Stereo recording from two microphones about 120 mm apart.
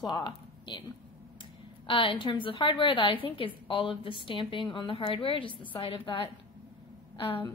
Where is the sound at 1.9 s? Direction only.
45° left (ahead or behind).